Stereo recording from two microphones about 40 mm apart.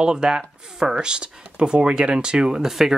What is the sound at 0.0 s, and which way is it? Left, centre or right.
Speech, centre.